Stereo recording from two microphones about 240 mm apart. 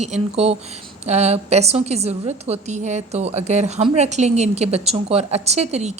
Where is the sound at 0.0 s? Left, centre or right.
Right.